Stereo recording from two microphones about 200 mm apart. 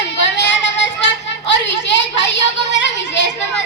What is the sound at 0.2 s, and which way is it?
Child singing, 60° left (ahead or behind).